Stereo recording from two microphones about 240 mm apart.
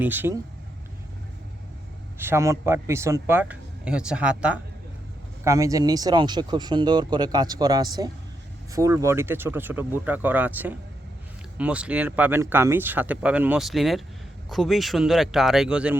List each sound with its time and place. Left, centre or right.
0.0 s speech: centre
2.1 s speech: centre